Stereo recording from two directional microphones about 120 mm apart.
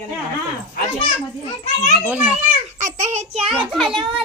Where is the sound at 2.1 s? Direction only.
10° right (ahead or behind).